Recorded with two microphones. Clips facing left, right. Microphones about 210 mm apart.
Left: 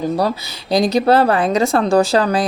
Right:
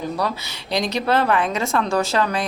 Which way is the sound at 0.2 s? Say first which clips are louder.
Left 6 dB; 35° left (ahead or behind).